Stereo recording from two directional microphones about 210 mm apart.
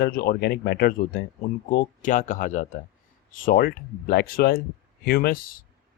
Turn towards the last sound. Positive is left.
turn(degrees=45)  # may be behind; listen again after turning